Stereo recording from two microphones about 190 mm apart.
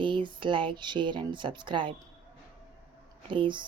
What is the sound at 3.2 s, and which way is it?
Speech, 25° right (ahead or behind).